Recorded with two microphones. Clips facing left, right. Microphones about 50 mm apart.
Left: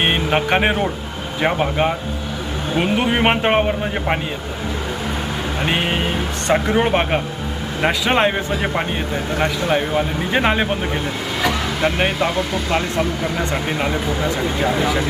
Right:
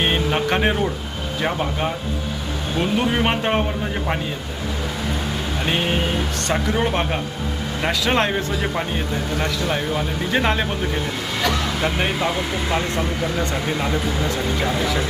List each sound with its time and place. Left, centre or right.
0.0 s speech: left
5.6 s speech: left
11.3 s speech: centre
12.7 s speech: left
13.9 s speech: centre